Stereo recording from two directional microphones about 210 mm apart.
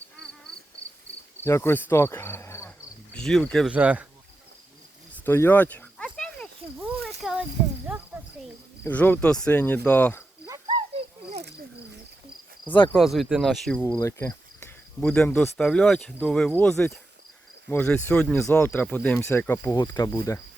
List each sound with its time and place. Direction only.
1.4 s speech: 10° left (ahead or behind); by 4.0 s 5° right (ahead or behind)
5.1 s cricket: 10° left (ahead or behind)
7.2 s a sound: centre (ahead or behind)
8.8 s speech: 5° left (ahead or behind)
10.4 s a sound: 20° right (ahead or behind)
11.3 s cricket: 55° right (ahead or behind)
12.9 s speech: centre (ahead or behind); by 20.4 s 15° left (ahead or behind)